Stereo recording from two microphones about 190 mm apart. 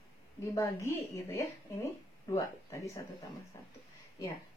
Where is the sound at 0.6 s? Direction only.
15° left (ahead or behind).